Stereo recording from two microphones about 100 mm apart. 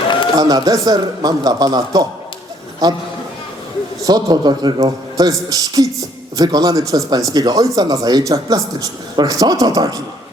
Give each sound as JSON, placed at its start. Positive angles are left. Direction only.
{"t": 0.3, "sound": "a man's voice", "side_deg": -40}
{"t": 4.0, "sound": "a man's voice", "side_deg": -40}